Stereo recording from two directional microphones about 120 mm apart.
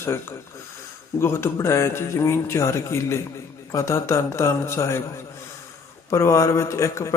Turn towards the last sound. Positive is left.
turn(degrees=25)  # may be behind; listen again after turning